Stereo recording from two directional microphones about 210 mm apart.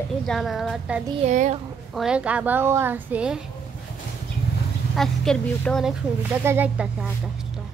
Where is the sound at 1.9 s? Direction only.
5° right (ahead or behind).